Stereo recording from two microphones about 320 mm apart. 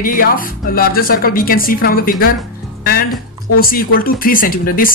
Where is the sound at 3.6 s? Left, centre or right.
Left.